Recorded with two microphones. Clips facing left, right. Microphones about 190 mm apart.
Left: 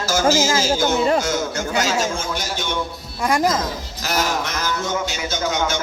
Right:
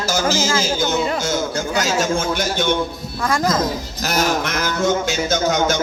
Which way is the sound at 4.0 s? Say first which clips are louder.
Right 3 dB; 45° right (ahead or behind).